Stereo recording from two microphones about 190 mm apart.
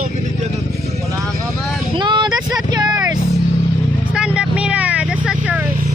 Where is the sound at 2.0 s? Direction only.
25° right (ahead or behind).